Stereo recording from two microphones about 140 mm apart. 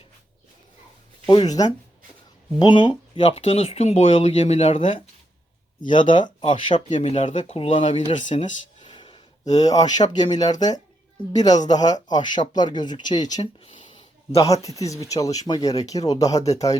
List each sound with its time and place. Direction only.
1.3 s speech: 30° left (ahead or behind)
3.2 s speech: 45° left (ahead or behind)
6.7 s speech: 50° left (ahead or behind); by 8.4 s 35° left (ahead or behind)
8.8 s a sound: 35° left (ahead or behind)
9.4 s speech: 25° left (ahead or behind)
13.4 s a sound: 40° left (ahead or behind)
14.4 s speech: 25° left (ahead or behind)